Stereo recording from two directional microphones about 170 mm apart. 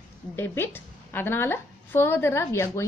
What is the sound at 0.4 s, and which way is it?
A woman's voice, 15° left (ahead or behind).